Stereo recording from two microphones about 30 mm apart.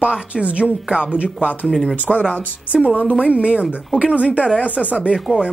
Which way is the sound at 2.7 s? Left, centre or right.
Right.